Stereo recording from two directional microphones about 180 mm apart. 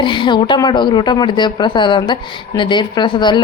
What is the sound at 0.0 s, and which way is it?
A woman's voice, 25° left (ahead or behind).